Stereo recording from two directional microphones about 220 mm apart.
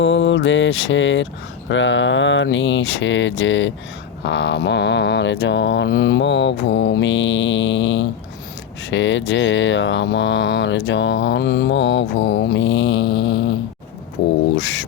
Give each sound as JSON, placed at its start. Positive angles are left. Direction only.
{"t": 0.0, "sound": "speech", "side_deg": 55}
{"t": 13.1, "sound": "a sound", "side_deg": 20}
{"t": 14.5, "sound": "speech", "side_deg": 50}